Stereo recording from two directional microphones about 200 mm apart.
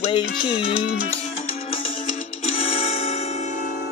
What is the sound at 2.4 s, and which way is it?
Music, 30° left (ahead or behind).